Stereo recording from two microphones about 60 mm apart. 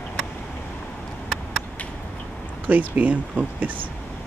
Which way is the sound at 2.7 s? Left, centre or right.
Right.